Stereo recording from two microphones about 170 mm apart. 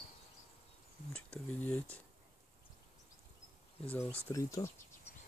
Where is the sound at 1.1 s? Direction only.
10° left (ahead or behind).